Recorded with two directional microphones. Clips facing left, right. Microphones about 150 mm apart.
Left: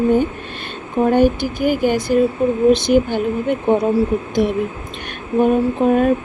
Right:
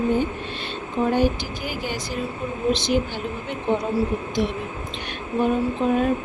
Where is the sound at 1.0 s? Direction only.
55° left (ahead or behind).